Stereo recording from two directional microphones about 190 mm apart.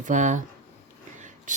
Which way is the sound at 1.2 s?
40° right (ahead or behind).